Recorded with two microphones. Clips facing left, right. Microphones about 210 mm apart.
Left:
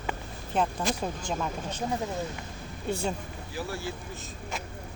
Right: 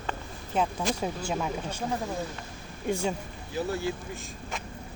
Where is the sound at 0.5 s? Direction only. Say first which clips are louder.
Even; 10° right (ahead or behind).